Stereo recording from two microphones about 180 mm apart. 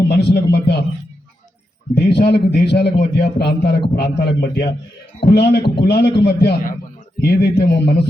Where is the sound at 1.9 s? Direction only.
65° left (ahead or behind).